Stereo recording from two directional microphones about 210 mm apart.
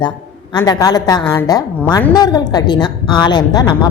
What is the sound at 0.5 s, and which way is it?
A woman's voice, 20° left (ahead or behind).